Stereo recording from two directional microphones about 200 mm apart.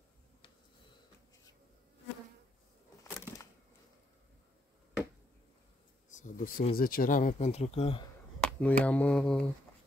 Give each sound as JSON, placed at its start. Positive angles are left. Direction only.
{"t": 6.1, "sound": "speech", "side_deg": 45}
{"t": 8.4, "sound": "speech", "side_deg": 5}